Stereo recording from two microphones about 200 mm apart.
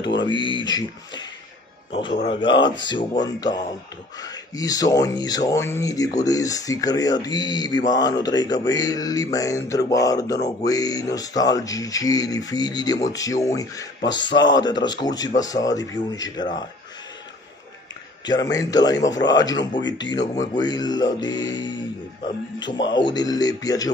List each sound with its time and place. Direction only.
0.2 s speech: 25° left (ahead or behind)
18.2 s speech: 20° left (ahead or behind)